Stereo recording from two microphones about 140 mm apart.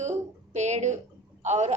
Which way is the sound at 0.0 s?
55° right (ahead or behind).